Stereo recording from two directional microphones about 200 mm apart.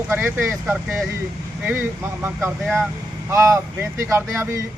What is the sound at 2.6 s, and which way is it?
Speech, centre (ahead or behind).